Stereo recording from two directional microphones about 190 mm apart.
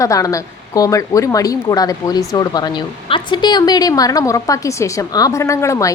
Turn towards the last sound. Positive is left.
turn(degrees=15)  # may be behind; listen again after turning